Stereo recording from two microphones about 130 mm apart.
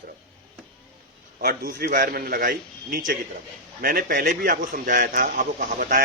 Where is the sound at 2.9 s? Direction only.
90° right.